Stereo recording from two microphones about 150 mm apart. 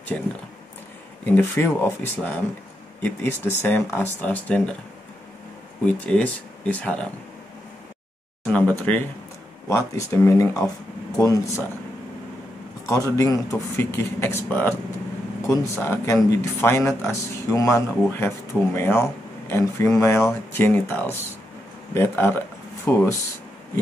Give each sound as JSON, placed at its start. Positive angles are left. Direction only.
{"t": 0.1, "sound": "a man's voice", "side_deg": 5}
{"t": 6.0, "sound": "a man's voice", "side_deg": 10}
{"t": 8.5, "sound": "a man's voice", "side_deg": 10}
{"t": 12.8, "sound": "a man's voice", "side_deg": 20}